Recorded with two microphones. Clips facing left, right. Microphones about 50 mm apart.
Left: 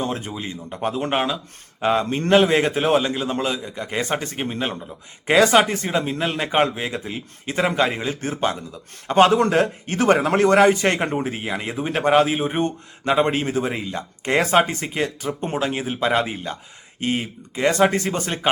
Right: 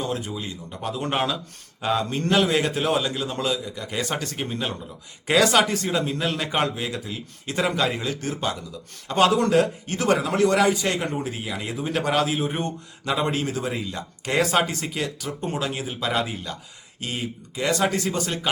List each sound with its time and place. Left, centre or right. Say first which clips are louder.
0.0 s a man's voice: left 2 dB; left